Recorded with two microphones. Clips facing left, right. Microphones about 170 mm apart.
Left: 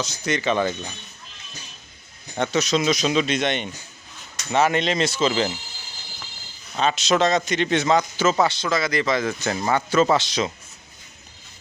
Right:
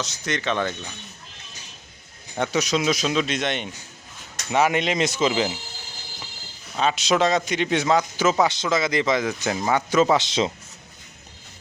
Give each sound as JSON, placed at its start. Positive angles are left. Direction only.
{"t": 0.0, "sound": "speech", "side_deg": 0}
{"t": 2.3, "sound": "a man's voice", "side_deg": -10}
{"t": 6.7, "sound": "a man's voice", "side_deg": -10}